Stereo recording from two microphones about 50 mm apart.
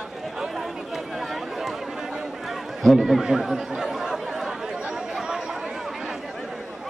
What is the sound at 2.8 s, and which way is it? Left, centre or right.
Speech, centre.